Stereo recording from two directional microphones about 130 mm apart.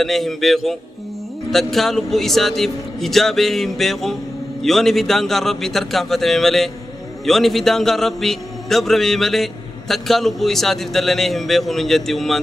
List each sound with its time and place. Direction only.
0.0 s a man's voice: centre (ahead or behind)